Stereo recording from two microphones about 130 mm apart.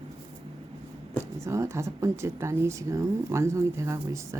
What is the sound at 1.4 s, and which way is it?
Speech, 20° right (ahead or behind).